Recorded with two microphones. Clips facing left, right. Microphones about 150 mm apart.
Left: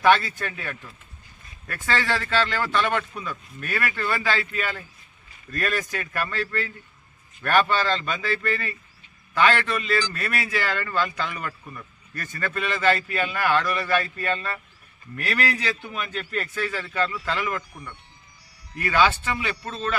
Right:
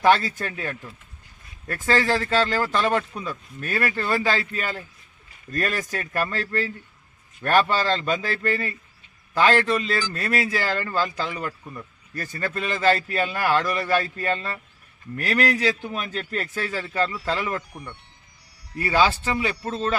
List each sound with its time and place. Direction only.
0.0 s speech: 35° right (ahead or behind)